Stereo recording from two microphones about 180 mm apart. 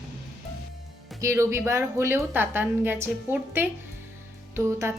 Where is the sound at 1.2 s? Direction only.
15° right (ahead or behind).